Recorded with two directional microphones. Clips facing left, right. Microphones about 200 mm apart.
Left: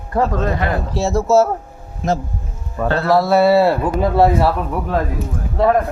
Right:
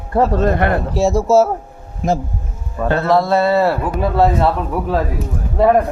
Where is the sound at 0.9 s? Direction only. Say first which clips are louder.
Right 1 dB; 10° right (ahead or behind).